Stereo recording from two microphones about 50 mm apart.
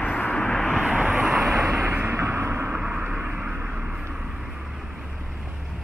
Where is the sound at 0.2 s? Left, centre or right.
Centre.